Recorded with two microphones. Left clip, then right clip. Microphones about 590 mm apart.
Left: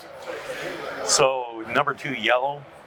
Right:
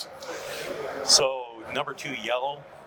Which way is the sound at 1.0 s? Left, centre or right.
Left.